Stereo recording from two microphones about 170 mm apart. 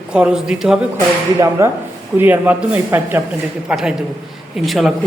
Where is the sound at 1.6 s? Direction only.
15° right (ahead or behind); by 4.9 s centre (ahead or behind).